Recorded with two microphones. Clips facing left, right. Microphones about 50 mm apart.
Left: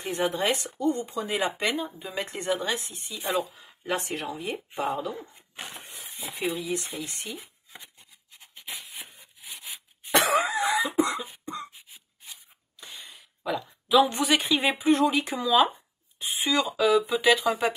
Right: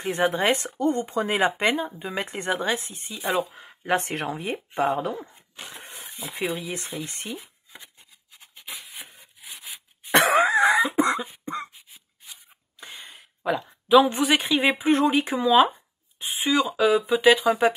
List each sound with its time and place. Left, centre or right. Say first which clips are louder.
0.1 s speech: right 4 dB; right
1.4 s speech: right 5 dB; right
4.0 s speech: right 3 dB; right
7.1 s speech: right 3 dB; right
8.8 s rub: right 1 dB; centre
10.1 s cough: right 5 dB; right
11.1 s cough: right 6 dB; centre
11.7 s a sound: even; centre
12.8 s a sound: right 3 dB; right
13.6 s speech: right 4 dB; right
14.2 s speech: right 3 dB; centre
14.8 s speech: right 2 dB; right
16.4 s speech: right 3 dB; centre